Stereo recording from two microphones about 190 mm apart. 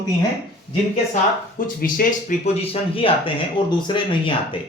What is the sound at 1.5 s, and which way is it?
Speech, 45° left (ahead or behind).